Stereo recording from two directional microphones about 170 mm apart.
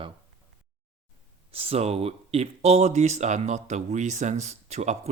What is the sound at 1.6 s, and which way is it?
Speech, 35° right (ahead or behind).